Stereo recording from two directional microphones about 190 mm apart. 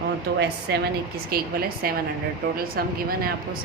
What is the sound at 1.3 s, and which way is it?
A woman's voice, 50° right (ahead or behind).